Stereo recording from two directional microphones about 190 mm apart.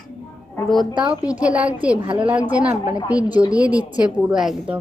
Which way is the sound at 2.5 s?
5° right (ahead or behind).